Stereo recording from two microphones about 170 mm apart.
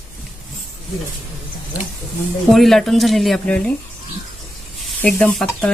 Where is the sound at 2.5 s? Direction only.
Centre (ahead or behind).